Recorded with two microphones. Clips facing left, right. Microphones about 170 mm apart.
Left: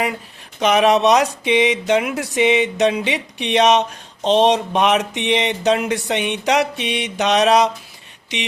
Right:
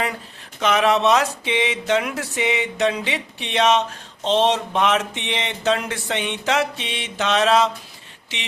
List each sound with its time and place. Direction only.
0.6 s speech: 20° left (ahead or behind)